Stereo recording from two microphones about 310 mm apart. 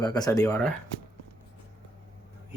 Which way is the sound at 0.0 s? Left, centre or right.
Centre.